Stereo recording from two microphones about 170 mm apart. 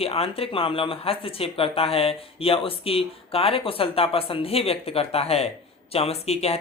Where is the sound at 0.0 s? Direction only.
35° left (ahead or behind).